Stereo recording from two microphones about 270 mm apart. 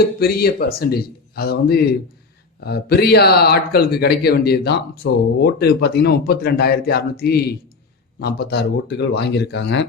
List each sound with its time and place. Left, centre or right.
0.2 s a man's voice: left